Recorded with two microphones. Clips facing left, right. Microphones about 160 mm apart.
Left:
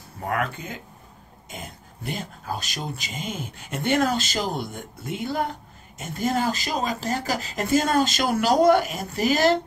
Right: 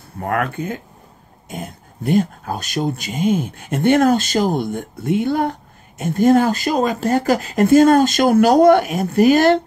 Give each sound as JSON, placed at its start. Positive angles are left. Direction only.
{"t": 0.2, "sound": "speech", "side_deg": -55}